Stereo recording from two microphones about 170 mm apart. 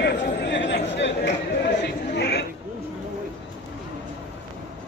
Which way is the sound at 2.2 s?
80° left.